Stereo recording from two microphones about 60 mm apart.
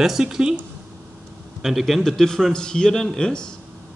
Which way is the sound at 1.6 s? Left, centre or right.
Centre.